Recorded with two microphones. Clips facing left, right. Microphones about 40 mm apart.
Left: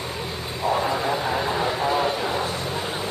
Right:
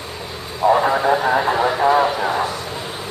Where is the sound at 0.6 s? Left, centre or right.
Right.